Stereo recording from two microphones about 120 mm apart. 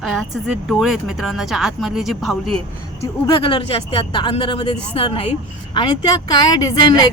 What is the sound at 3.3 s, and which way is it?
Speech, 45° left (ahead or behind).